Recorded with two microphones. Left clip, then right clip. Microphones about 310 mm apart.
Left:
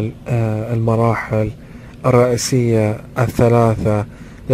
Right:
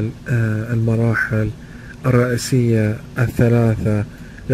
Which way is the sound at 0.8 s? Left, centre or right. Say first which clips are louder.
Left 2 dB; centre.